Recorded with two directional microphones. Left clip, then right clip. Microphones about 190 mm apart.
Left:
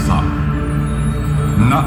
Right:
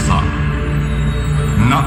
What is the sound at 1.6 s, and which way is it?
Speech, 5° right (ahead or behind).